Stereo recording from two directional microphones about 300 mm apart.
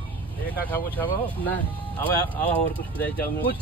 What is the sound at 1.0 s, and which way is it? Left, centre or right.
Speech, centre.